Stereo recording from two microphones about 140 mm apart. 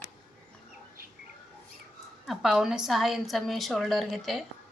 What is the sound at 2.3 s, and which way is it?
A woman's voice, 5° right (ahead or behind).